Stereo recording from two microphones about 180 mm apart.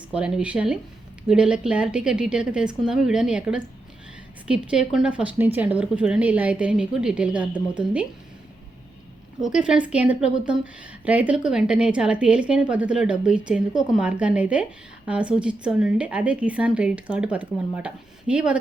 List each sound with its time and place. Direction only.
0.1 s a woman's voice: 5° right (ahead or behind)
9.4 s a woman's voice: 5° right (ahead or behind)